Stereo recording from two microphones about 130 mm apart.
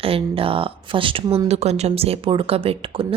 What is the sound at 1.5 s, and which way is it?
Speech, 55° right (ahead or behind).